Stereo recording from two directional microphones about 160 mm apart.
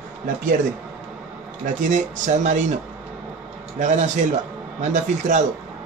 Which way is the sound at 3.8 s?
45° right (ahead or behind).